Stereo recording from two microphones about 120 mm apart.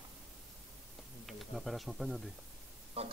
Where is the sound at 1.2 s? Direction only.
Centre (ahead or behind).